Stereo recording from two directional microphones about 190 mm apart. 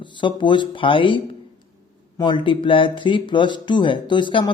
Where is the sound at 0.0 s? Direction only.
25° left (ahead or behind).